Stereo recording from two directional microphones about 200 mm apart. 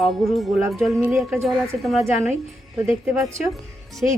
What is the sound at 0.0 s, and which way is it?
A woman's voice, centre (ahead or behind).